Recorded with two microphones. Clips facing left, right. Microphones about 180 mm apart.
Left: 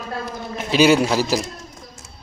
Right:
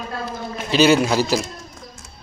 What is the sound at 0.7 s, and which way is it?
Speech, 10° left (ahead or behind).